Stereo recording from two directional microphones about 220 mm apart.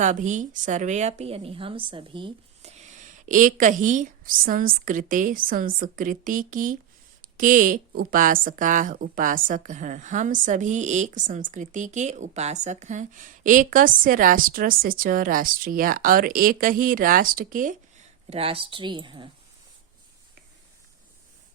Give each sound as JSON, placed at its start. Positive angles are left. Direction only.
{"t": 0.0, "sound": "a woman's voice", "side_deg": -35}